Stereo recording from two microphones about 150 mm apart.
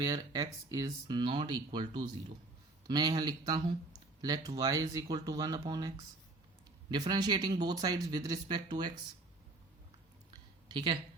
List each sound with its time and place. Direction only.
0.0 s speech: 25° right (ahead or behind)
6.9 s speech: 25° right (ahead or behind)
10.7 s speech: 30° right (ahead or behind)